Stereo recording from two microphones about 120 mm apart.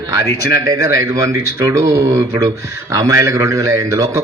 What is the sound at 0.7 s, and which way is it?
A man's voice, 30° right (ahead or behind).